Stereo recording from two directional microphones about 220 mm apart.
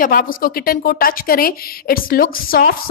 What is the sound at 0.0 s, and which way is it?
A woman's voice, 40° left (ahead or behind).